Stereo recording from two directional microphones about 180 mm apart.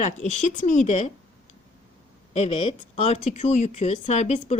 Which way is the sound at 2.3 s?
35° left (ahead or behind).